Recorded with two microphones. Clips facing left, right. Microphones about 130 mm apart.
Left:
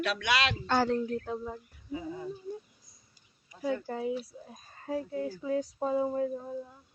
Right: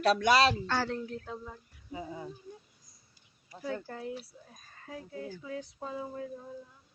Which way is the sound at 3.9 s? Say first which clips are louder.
Left 7 dB; 15° left (ahead or behind).